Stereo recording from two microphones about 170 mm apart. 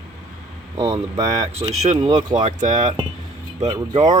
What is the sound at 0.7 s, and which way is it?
Speech, 20° right (ahead or behind).